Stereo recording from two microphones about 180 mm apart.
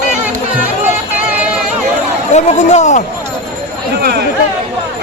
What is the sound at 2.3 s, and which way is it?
Speech, 40° left (ahead or behind).